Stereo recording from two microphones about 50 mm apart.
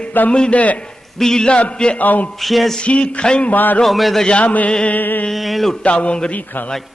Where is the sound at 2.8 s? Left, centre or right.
Left.